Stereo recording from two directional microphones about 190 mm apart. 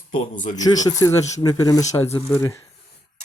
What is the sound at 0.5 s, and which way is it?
Speech, 20° left (ahead or behind).